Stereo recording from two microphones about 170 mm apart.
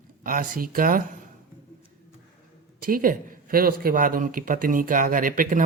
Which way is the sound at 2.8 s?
55° right (ahead or behind).